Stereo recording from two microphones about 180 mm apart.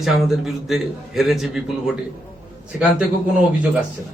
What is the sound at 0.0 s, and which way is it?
A man's voice, centre (ahead or behind).